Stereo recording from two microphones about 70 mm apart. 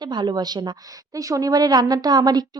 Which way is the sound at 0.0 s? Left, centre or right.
Right.